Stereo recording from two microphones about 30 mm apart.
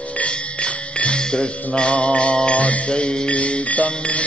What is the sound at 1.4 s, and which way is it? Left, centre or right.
Mantra, left.